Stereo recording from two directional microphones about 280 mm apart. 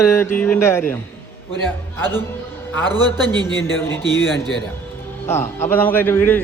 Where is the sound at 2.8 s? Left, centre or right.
Centre.